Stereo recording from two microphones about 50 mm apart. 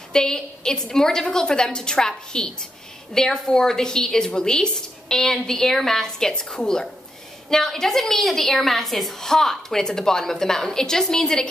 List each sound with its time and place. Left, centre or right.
0.1 s a woman's voice: centre